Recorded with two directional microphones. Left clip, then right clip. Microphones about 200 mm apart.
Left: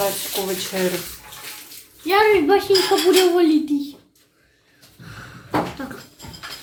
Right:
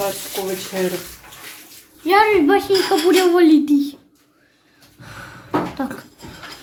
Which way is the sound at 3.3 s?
60° right (ahead or behind).